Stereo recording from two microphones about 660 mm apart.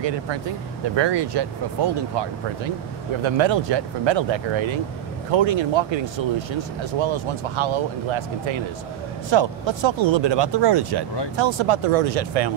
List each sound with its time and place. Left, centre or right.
0.9 s speech: right